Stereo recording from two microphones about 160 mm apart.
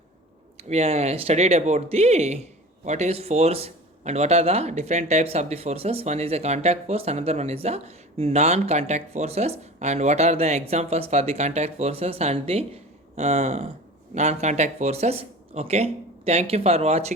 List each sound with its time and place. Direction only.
0.5 s speech: 40° right (ahead or behind)